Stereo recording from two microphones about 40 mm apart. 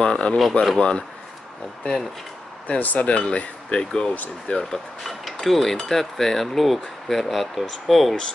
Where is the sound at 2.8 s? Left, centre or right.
Left.